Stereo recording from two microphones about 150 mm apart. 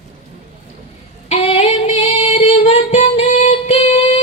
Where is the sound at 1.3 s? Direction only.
45° left (ahead or behind).